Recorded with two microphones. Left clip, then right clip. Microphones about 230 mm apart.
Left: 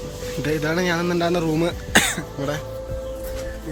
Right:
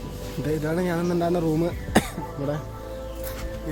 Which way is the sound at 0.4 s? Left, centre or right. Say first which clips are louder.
Left 4 dB; centre.